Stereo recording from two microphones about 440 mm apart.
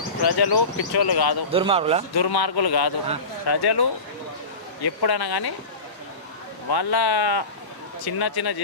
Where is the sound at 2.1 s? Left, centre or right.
Left.